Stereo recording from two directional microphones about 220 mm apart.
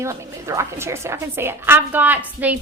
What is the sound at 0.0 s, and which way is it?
A woman's voice, 10° right (ahead or behind).